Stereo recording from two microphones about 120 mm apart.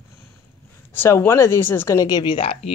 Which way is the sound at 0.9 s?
20° left (ahead or behind).